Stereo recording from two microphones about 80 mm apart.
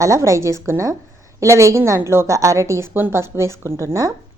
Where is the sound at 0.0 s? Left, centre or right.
Right.